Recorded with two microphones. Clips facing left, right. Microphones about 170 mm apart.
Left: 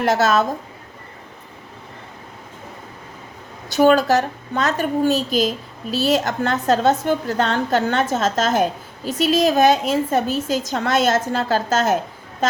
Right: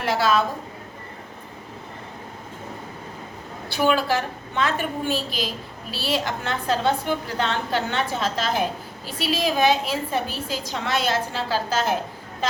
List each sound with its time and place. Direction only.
0.0 s a woman's voice: 45° left (ahead or behind)
3.7 s a woman's voice: 45° left (ahead or behind)